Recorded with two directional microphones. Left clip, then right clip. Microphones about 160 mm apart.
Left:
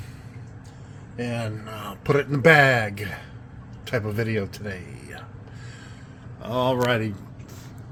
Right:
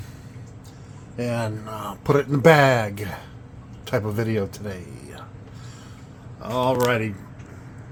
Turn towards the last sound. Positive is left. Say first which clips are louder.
# right 2 dB
turn(degrees=0)  # may be behind; listen again after turning